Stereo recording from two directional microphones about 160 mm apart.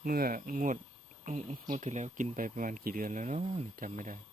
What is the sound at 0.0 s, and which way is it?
Speech, 70° right (ahead or behind).